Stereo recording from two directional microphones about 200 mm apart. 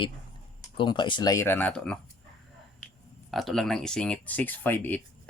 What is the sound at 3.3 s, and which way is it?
Speech, centre (ahead or behind).